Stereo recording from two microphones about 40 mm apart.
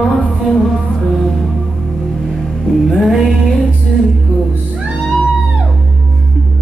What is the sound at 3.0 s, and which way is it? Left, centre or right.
Music, centre.